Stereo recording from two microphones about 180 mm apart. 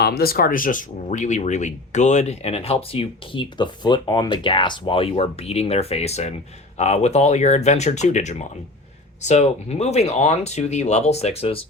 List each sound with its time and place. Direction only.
0.0 s speech: 60° left (ahead or behind); by 11.6 s 30° left (ahead or behind)